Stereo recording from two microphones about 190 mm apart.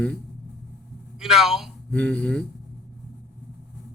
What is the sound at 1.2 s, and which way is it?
Speech, centre (ahead or behind).